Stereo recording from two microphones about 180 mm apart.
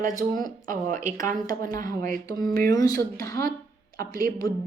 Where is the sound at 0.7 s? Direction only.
45° right (ahead or behind).